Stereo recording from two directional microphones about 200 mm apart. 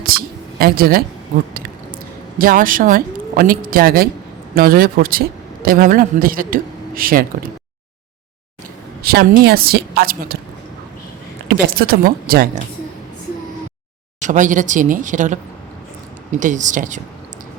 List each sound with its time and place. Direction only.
0.0 s a woman's voice: 50° right (ahead or behind)
9.0 s a man's voice: 50° right (ahead or behind)
11.4 s a man's voice: 50° right (ahead or behind)
14.2 s speech: 40° right (ahead or behind)
16.4 s speech: 40° right (ahead or behind)